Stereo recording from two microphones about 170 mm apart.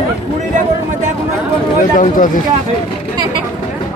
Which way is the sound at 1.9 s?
50° left (ahead or behind).